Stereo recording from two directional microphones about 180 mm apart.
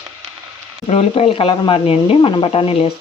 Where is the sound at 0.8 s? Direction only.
35° left (ahead or behind).